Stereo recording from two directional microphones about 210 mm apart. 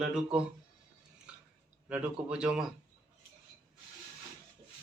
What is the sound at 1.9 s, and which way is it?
Speech, 5° right (ahead or behind).